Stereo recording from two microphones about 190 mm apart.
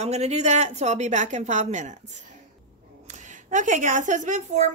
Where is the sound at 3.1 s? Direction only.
40° right (ahead or behind).